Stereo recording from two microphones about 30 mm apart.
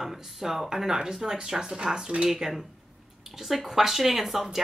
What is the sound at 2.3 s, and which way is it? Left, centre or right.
Speech, centre.